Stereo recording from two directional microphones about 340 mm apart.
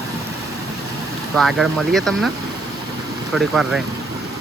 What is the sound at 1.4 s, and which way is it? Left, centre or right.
Speech, centre.